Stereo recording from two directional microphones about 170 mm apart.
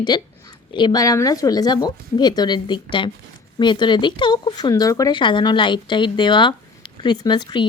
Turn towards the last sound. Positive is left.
turn(degrees=25)  # may be behind; listen again after turning